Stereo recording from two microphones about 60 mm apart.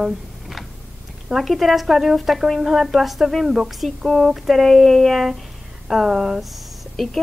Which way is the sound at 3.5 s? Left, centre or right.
Centre.